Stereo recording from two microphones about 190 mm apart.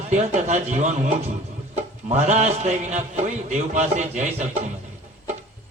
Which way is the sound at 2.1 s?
35° right (ahead or behind).